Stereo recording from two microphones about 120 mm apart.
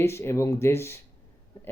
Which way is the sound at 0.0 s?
20° left (ahead or behind).